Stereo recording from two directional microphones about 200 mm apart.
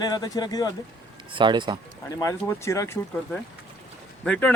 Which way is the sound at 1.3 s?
25° right (ahead or behind).